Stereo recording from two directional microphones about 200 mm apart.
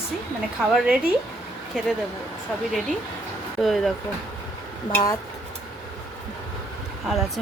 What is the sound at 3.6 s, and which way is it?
Speech, centre (ahead or behind).